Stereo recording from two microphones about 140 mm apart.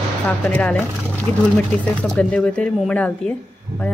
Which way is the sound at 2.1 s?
10° left (ahead or behind).